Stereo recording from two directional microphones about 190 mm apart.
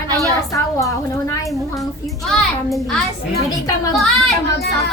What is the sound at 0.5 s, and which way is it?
Female singing, 15° left (ahead or behind).